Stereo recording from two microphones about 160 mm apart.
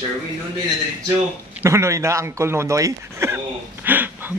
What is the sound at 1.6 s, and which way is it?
Speech, 20° right (ahead or behind).